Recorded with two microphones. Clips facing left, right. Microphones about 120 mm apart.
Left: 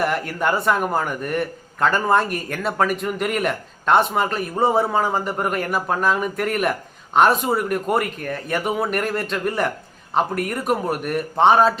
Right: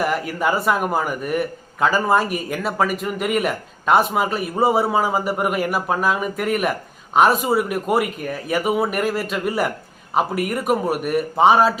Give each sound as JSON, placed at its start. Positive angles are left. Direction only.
{"t": 0.0, "sound": "a man's voice", "side_deg": 0}